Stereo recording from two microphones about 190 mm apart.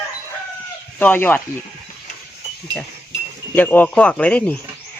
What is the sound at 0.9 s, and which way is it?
Speech, 10° left (ahead or behind).